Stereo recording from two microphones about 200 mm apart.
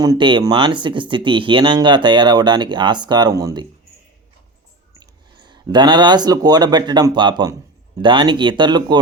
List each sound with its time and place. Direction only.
0.0 s speech: 20° right (ahead or behind)
4.9 s speech: 20° right (ahead or behind)